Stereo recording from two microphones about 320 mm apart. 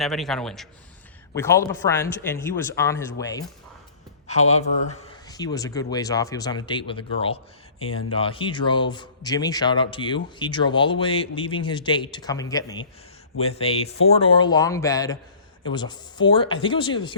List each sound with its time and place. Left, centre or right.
0.0 s a man's voice: centre
4.3 s a man's voice: left